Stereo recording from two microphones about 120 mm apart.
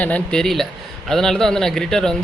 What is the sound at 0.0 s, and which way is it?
A man's voice, 10° left (ahead or behind).